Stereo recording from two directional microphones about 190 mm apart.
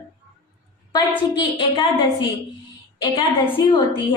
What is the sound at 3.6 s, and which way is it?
Speech, 20° left (ahead or behind).